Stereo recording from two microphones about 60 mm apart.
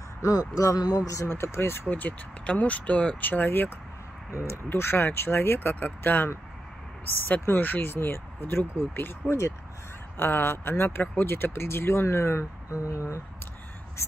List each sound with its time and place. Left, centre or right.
0.2 s speech: left
1.4 s speech: left
1.9 s speech: left
7.4 s speech: left
12.7 s speech: left